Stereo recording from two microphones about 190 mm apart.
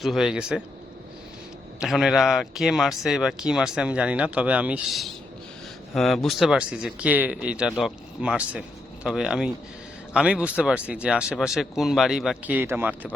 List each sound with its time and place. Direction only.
0.0 s speech: centre (ahead or behind)
1.8 s speech: centre (ahead or behind)